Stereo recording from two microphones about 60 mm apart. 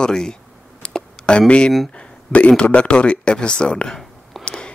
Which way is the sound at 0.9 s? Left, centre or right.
Centre.